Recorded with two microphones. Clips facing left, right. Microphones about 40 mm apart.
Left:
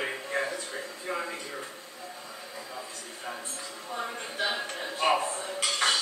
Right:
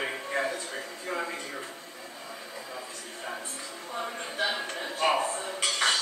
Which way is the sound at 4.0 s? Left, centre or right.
Centre.